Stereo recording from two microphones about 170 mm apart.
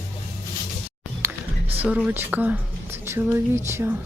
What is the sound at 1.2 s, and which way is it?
Music, 15° right (ahead or behind).